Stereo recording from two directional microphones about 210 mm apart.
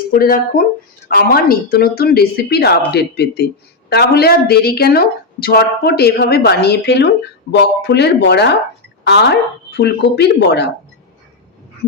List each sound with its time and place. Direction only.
0.1 s a woman's voice: 45° left (ahead or behind)